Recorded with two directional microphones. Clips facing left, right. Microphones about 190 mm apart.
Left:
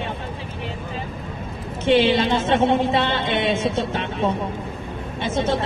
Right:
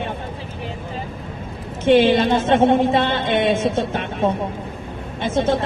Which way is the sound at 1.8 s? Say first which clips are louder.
Right 3 dB; 50° right (ahead or behind).